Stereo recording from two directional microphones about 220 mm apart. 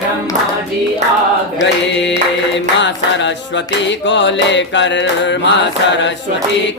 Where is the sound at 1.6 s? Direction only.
55° left (ahead or behind).